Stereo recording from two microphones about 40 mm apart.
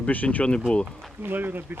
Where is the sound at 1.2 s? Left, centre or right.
Right.